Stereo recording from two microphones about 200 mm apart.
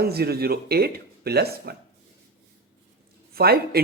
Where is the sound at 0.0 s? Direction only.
50° right (ahead or behind).